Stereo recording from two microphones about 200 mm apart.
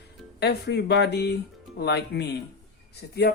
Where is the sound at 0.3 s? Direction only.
55° left (ahead or behind).